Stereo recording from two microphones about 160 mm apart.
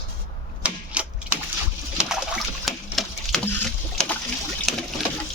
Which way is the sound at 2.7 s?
Centre (ahead or behind).